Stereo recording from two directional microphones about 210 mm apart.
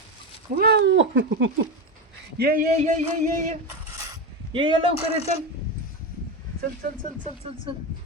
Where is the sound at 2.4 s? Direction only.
40° right (ahead or behind).